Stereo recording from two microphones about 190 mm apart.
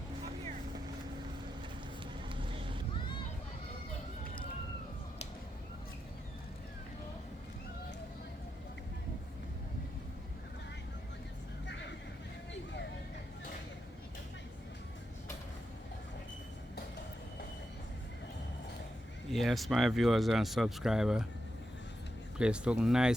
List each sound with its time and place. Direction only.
2.3 s vehicle: 25° right (ahead or behind)
11.6 s vehicle: 70° left (ahead or behind)
19.3 s speech: centre (ahead or behind)
22.4 s speech: 5° right (ahead or behind)